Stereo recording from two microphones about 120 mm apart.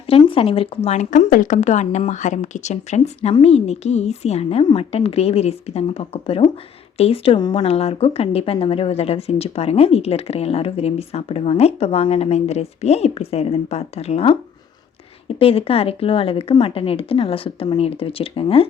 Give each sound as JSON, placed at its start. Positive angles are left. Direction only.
{"t": 0.3, "sound": "speech", "side_deg": 50}
{"t": 7.3, "sound": "speech", "side_deg": 35}
{"t": 7.6, "sound": "speech", "side_deg": 55}
{"t": 15.4, "sound": "speech", "side_deg": 55}